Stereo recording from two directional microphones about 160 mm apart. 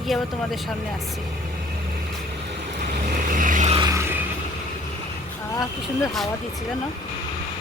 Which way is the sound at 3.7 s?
25° right (ahead or behind).